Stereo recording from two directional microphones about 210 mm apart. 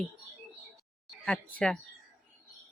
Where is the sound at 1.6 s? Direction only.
Centre (ahead or behind).